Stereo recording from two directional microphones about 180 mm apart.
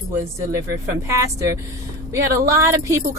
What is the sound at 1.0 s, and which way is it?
Speech, 15° right (ahead or behind).